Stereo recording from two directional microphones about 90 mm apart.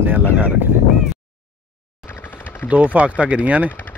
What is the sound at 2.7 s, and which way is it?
Speech, 15° right (ahead or behind).